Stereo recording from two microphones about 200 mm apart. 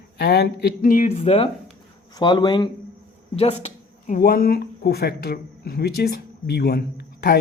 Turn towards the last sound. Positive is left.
turn(degrees=50)  # may be behind; listen again after turning